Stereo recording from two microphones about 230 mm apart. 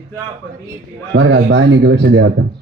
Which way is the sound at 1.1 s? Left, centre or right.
Right.